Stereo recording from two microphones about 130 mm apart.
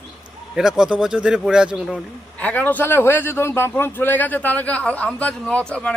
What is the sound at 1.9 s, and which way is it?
A man's voice, 10° left (ahead or behind).